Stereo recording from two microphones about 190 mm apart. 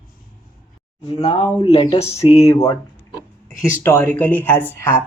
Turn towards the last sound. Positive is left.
turn(degrees=10)  # may be behind; listen again after turning